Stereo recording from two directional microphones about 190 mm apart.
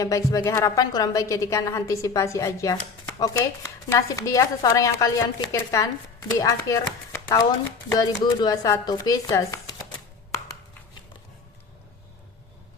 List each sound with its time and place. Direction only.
0.0 s a woman's voice: 20° left (ahead or behind)